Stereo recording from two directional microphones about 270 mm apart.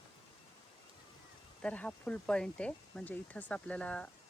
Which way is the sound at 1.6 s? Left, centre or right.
Centre.